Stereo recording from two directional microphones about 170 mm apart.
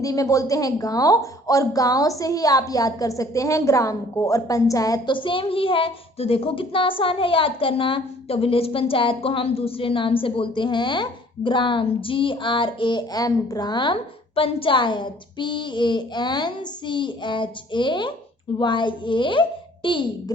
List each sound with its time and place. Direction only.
0.0 s a woman's voice: 20° left (ahead or behind)